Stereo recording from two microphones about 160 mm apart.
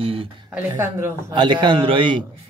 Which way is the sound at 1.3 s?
30° right (ahead or behind).